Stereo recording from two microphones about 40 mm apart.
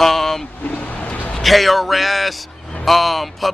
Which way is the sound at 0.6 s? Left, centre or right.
Left.